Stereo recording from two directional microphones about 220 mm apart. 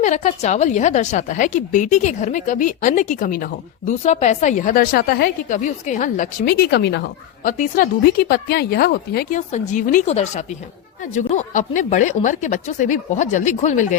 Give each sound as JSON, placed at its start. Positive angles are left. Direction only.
{"t": 0.0, "sound": "a woman's voice", "side_deg": 35}
{"t": 9.5, "sound": "a woman's voice", "side_deg": 35}